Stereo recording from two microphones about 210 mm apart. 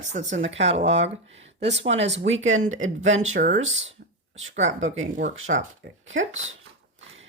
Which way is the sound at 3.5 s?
60° right (ahead or behind).